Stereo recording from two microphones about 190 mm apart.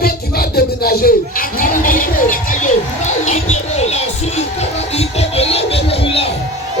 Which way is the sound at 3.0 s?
35° left (ahead or behind).